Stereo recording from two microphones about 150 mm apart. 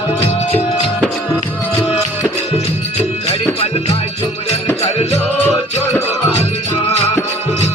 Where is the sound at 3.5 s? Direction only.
40° left (ahead or behind).